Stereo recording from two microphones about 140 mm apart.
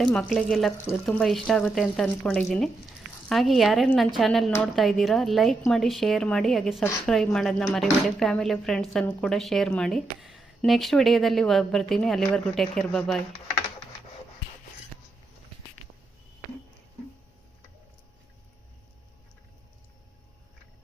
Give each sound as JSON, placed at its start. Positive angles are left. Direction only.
{"t": 0.0, "sound": "speech", "side_deg": 5}